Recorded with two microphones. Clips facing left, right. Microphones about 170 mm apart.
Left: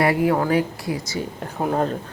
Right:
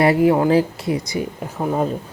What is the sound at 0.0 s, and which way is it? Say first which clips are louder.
Speech: right 4 dB; 25° right (ahead or behind).